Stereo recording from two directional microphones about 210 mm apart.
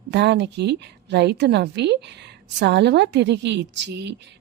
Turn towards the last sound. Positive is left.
turn(degrees=-55)  # may be behind; listen again after turning